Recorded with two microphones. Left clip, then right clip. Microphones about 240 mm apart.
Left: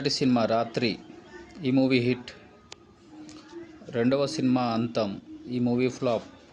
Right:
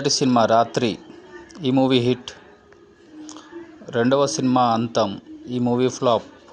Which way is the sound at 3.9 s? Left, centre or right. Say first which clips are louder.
Right 7 dB; centre.